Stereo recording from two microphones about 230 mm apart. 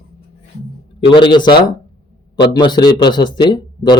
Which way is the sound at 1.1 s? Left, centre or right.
Left.